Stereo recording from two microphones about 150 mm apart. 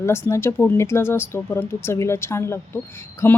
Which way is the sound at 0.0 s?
20° left (ahead or behind).